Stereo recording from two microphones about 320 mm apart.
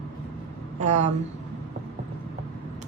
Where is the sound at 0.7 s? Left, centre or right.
Right.